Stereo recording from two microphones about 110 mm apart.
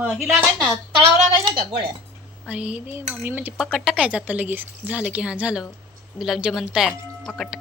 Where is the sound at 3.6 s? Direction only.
5° right (ahead or behind).